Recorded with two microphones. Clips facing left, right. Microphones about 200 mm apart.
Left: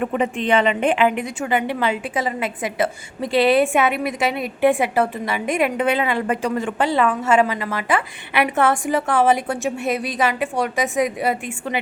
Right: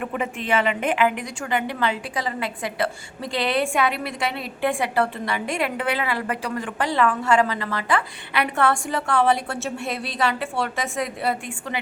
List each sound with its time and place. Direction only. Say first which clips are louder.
0.1 s a woman's voice: left 5 dB; 30° left (ahead or behind)